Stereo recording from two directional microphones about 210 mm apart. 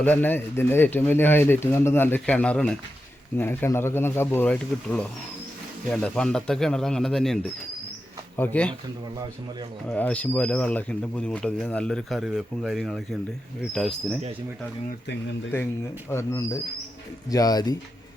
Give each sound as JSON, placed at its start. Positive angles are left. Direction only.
{"t": 0.0, "sound": "speech", "side_deg": 10}
{"t": 9.9, "sound": "speech", "side_deg": 5}
{"t": 16.0, "sound": "speech", "side_deg": 15}